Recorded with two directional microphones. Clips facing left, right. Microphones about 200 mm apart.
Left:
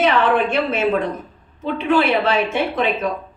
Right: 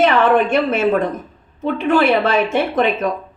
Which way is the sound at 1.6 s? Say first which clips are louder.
Right 3 dB; 50° right (ahead or behind).